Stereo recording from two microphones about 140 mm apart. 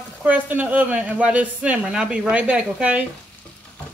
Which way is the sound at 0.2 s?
10° right (ahead or behind).